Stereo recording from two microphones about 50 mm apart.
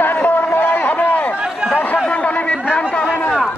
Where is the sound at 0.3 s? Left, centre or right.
Left.